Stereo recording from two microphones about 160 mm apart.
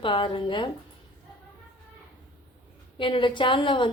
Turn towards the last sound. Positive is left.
turn(degrees=30)  # may be behind; listen again after turning